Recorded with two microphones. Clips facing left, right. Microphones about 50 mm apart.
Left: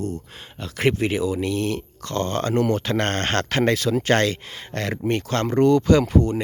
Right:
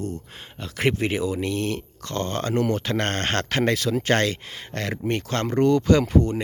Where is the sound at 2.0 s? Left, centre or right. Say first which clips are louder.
Left 3 dB; centre.